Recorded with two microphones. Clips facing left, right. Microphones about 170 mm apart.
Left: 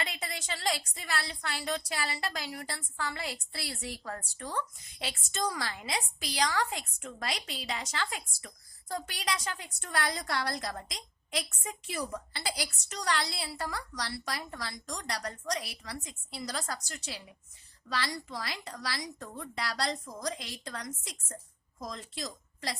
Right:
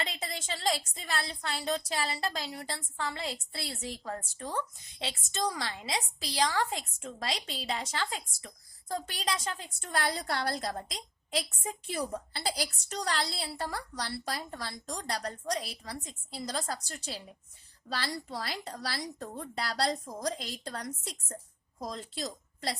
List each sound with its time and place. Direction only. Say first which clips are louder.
0.0 s a woman's voice: right 1 dB; 25° right (ahead or behind)